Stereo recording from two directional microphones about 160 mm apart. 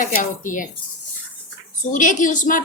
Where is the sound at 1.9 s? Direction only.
50° left (ahead or behind).